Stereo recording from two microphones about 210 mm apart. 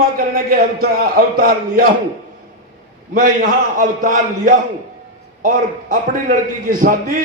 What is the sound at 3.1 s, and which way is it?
A man's voice, 40° right (ahead or behind).